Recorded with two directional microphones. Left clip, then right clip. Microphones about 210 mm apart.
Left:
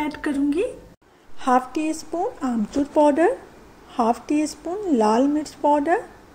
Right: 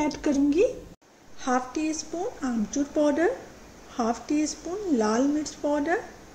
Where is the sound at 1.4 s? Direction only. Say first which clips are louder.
Left 7 dB; 15° left (ahead or behind).